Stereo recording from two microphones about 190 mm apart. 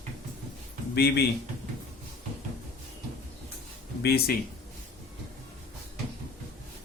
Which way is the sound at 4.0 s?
55° left (ahead or behind).